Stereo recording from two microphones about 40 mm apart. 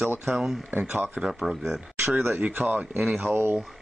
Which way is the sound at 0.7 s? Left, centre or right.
Right.